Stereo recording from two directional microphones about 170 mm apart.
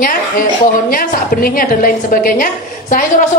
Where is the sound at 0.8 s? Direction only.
55° left (ahead or behind).